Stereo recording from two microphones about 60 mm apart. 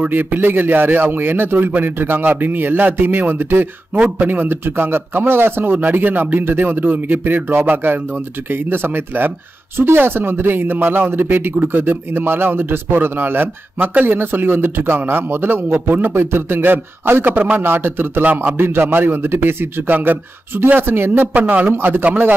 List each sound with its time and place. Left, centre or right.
0.1 s a man's voice: right
21.7 s a man's voice: right